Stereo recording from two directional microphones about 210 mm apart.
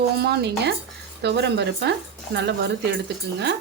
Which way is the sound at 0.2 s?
55° right (ahead or behind).